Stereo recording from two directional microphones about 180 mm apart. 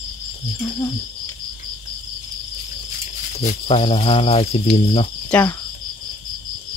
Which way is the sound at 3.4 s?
35° left (ahead or behind).